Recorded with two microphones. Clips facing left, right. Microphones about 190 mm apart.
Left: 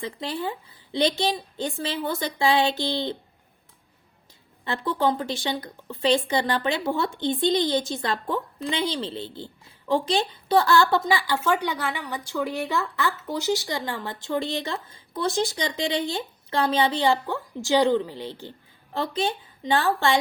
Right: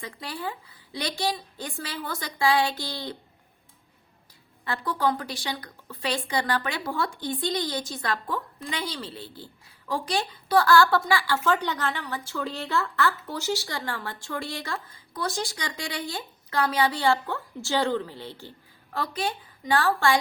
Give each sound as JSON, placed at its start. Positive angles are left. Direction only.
{"t": 0.0, "sound": "a woman's voice", "side_deg": 25}
{"t": 4.6, "sound": "a woman's voice", "side_deg": 25}